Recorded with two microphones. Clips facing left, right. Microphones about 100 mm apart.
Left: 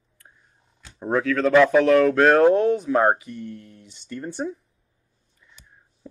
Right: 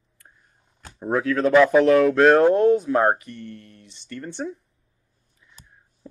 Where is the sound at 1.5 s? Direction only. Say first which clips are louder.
Right 1 dB; 5° right (ahead or behind).